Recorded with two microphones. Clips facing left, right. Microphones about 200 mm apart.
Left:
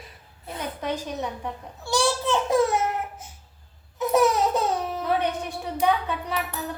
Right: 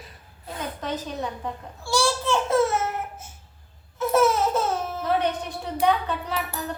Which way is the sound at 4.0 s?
15° left (ahead or behind).